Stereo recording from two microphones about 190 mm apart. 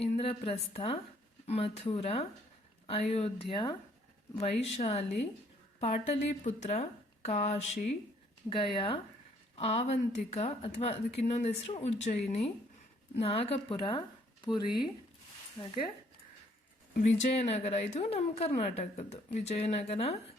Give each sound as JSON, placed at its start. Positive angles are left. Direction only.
{"t": 0.0, "sound": "a woman's voice", "side_deg": 30}
{"t": 17.0, "sound": "speech", "side_deg": 35}